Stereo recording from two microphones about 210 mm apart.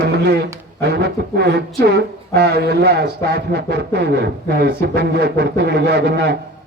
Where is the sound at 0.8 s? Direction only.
50° right (ahead or behind).